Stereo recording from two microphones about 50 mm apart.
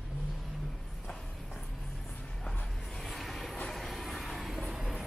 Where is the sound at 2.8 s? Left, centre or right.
Centre.